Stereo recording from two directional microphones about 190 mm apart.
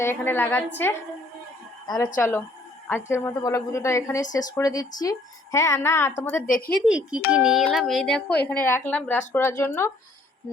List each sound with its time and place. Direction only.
0.0 s a woman's voice: 10° left (ahead or behind)
2.1 s a woman's voice: 10° left (ahead or behind)
6.4 s a woman's voice: 50° left (ahead or behind)
6.7 s a woman's voice: 5° right (ahead or behind); by 9.9 s 15° left (ahead or behind)